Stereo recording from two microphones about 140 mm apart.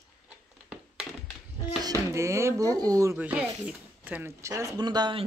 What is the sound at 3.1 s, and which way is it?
Speech, 10° right (ahead or behind).